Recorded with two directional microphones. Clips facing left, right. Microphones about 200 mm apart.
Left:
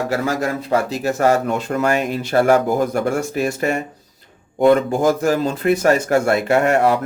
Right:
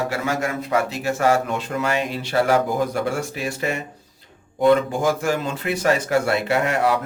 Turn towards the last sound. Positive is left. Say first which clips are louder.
# left 5 dB
turn(degrees=50)  # may be behind; listen again after turning